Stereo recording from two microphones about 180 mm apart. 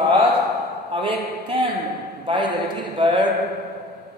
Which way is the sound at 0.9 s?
30° right (ahead or behind).